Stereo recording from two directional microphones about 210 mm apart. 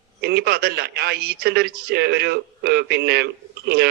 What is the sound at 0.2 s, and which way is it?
Speech, 50° right (ahead or behind).